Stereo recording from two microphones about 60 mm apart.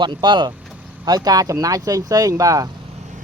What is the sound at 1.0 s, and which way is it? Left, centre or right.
Speech, right.